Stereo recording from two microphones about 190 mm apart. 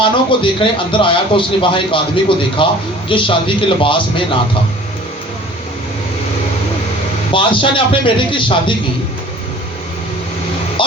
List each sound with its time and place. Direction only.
0.0 s a man's voice: 25° left (ahead or behind)
7.3 s a man's voice: 25° left (ahead or behind)
10.8 s music: 25° left (ahead or behind)